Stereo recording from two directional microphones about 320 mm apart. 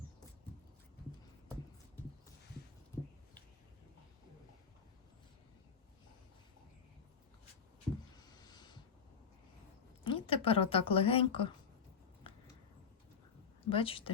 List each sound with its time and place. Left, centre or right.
8.1 s a sound: centre
10.0 s a woman's voice: centre
13.7 s a woman's voice: centre